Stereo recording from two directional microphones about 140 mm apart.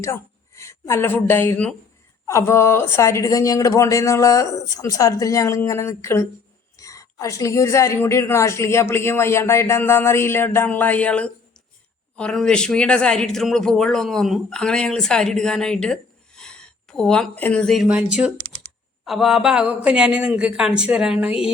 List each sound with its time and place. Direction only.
0.0 s a woman's voice: 20° left (ahead or behind); by 21.3 s 5° right (ahead or behind)